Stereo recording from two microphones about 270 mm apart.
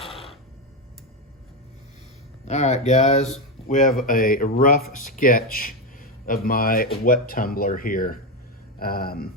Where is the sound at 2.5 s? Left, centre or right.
Left.